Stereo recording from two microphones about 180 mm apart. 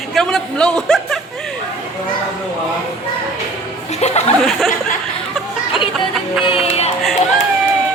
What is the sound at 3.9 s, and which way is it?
Speech, 35° left (ahead or behind).